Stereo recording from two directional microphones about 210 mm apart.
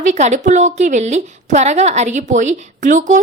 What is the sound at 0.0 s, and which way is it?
A woman's voice, 35° right (ahead or behind).